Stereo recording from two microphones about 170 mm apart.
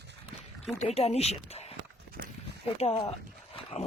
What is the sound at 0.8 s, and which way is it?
Speech, 40° left (ahead or behind).